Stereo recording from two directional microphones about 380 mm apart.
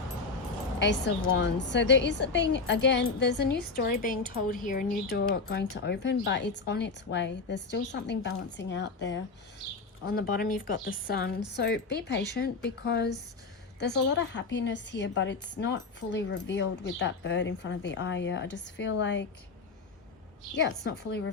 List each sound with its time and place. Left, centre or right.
0.8 s a woman's voice: left
10.3 s a woman's voice: left
20.6 s a woman's voice: left